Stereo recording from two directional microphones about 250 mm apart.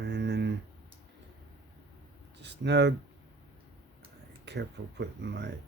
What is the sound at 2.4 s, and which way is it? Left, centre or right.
Speech, right.